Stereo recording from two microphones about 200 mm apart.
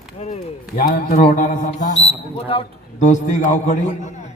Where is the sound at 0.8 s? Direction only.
45° left (ahead or behind).